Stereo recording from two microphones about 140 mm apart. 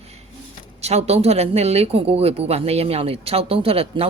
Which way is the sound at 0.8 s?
50° right (ahead or behind).